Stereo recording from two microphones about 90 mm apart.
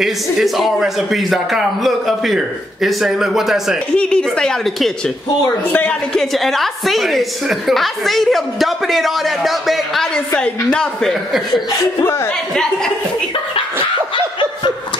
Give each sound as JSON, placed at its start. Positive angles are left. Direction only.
{"t": 0.0, "sound": "a woman's voice", "side_deg": -5}
{"t": 3.9, "sound": "a woman's voice", "side_deg": 10}
{"t": 5.7, "sound": "a woman's voice", "side_deg": 15}
{"t": 6.1, "sound": "a woman's voice", "side_deg": 0}
{"t": 10.3, "sound": "a woman's voice", "side_deg": 10}
{"t": 12.0, "sound": "speech", "side_deg": 30}